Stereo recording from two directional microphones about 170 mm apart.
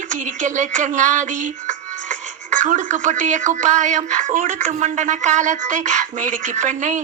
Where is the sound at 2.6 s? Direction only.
50° right (ahead or behind).